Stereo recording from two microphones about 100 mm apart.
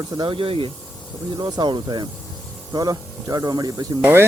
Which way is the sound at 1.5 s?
50° right (ahead or behind).